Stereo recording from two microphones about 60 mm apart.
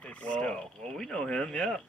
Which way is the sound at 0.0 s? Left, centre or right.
Left.